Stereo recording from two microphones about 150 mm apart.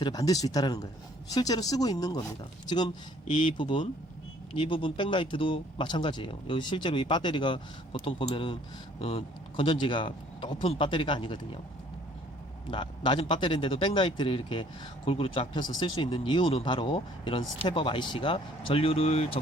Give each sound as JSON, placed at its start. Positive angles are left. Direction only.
{"t": 0.0, "sound": "speech", "side_deg": 25}
{"t": 12.7, "sound": "speech", "side_deg": 30}